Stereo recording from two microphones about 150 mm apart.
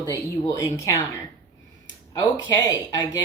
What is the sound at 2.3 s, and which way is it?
Speech, 20° left (ahead or behind).